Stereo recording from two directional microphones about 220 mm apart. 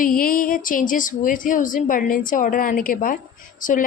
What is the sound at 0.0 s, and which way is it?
Speech, 40° left (ahead or behind).